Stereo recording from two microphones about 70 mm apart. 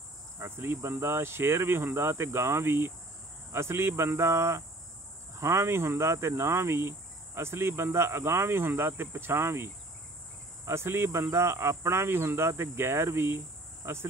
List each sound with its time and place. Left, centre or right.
0.4 s speech: right